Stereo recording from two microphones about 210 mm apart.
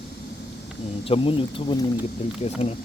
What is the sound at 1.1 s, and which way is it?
Speech, 25° left (ahead or behind).